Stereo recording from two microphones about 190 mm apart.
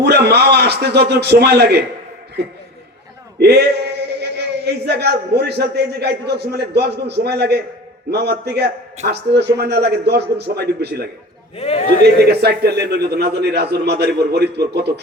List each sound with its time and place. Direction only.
0.0 s a man's voice: 60° right (ahead or behind)
3.3 s a man's voice: 60° right (ahead or behind)
11.5 s a man's voice: 30° left (ahead or behind)
12.0 s a man's voice: 60° right (ahead or behind)